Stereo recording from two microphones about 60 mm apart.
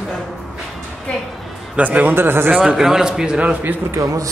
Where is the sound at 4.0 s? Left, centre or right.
Right.